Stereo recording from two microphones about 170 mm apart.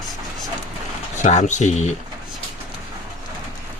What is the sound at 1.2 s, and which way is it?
Speech, 45° left (ahead or behind).